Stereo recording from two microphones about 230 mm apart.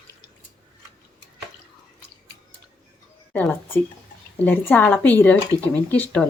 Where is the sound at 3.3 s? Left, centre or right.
Centre.